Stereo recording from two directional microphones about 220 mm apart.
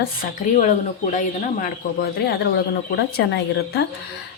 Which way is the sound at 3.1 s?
50° left (ahead or behind).